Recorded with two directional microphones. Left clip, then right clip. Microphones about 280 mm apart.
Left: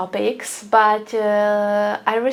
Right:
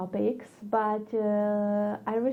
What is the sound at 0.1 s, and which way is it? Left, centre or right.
Speech, centre.